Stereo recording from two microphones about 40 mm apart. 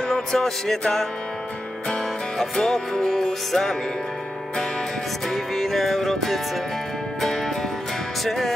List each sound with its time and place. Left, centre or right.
0.1 s music: centre
2.5 s music: centre
5.3 s music: centre